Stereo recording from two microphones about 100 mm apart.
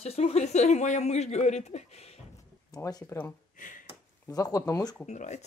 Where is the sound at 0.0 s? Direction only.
90° left.